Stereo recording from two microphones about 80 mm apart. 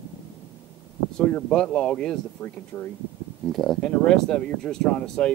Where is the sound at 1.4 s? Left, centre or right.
Centre.